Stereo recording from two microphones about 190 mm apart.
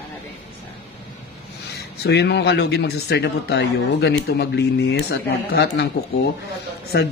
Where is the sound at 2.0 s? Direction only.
60° left (ahead or behind).